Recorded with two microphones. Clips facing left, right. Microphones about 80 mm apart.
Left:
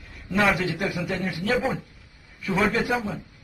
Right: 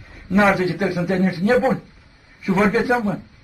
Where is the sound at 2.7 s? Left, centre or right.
Right.